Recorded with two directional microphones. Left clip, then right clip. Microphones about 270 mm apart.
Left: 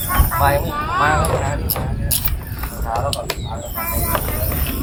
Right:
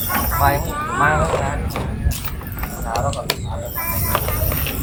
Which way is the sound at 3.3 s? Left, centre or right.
Right.